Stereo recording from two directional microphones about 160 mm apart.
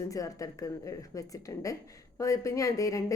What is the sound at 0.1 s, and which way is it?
A woman's voice, 20° left (ahead or behind).